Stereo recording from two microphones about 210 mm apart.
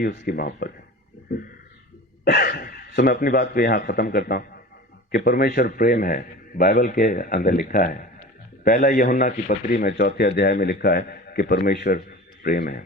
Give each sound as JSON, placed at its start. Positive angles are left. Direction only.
{"t": 0.0, "sound": "a man's voice", "side_deg": 45}
{"t": 2.2, "sound": "a man's voice", "side_deg": 45}